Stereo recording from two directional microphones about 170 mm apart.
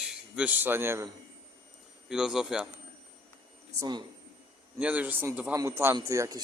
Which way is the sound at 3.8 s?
25° right (ahead or behind).